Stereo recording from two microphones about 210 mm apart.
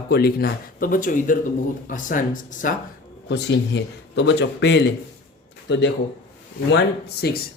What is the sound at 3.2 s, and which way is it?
Speech, 55° left (ahead or behind).